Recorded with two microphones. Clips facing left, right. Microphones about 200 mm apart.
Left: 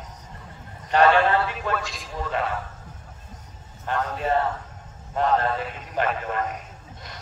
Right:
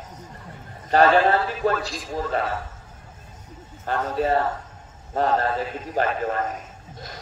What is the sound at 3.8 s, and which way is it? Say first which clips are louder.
Speech: right 3 dB; 40° right (ahead or behind).